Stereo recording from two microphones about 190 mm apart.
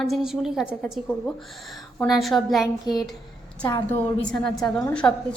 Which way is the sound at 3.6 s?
15° left (ahead or behind).